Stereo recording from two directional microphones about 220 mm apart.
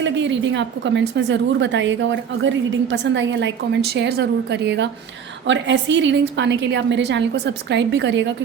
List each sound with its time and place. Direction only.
0.0 s a woman's voice: 55° right (ahead or behind)